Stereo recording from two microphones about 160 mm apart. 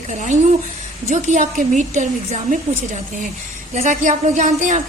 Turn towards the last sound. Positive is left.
turn(degrees=-50)  # may be behind; listen again after turning